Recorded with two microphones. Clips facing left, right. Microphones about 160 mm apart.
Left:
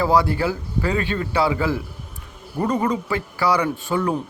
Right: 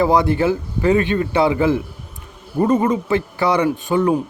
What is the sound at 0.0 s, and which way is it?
Speech, 20° right (ahead or behind).